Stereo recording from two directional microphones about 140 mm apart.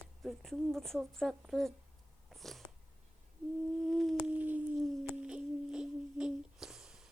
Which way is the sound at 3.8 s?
Centre (ahead or behind).